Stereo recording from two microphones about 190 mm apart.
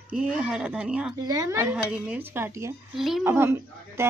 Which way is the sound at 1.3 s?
15° right (ahead or behind).